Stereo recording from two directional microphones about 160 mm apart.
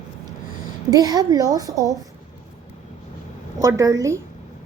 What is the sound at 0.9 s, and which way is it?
A woman's voice, 25° right (ahead or behind).